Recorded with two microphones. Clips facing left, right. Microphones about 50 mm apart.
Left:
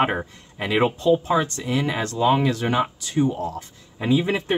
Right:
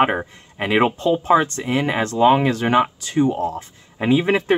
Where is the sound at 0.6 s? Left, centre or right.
Right.